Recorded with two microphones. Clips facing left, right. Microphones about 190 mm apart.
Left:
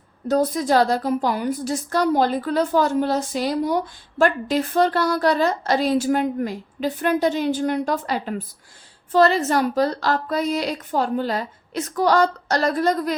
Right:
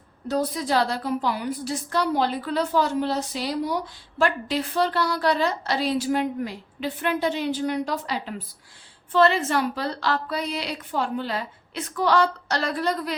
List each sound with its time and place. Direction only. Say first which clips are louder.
0.3 s a woman's voice: left 5 dB; 45° left (ahead or behind)